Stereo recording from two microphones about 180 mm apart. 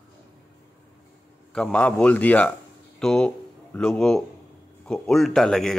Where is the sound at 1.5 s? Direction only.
5° left (ahead or behind).